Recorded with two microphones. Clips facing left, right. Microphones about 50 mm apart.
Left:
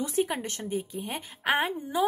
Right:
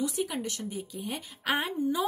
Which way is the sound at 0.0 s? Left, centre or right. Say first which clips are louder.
Left 3 dB; left.